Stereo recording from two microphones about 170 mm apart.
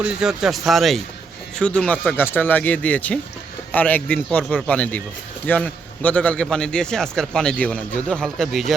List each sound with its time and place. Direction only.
0.0 s a man's voice: 5° right (ahead or behind)